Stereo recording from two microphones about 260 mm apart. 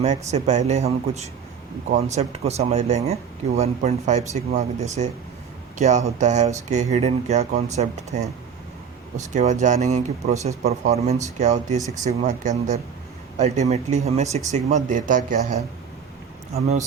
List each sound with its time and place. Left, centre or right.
0.0 s speech: right
9.1 s speech: right